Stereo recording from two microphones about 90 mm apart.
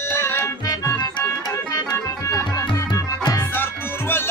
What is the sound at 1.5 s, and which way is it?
Organ, 40° left (ahead or behind).